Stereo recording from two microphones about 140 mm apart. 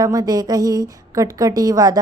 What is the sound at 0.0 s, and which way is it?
Speech, 25° right (ahead or behind).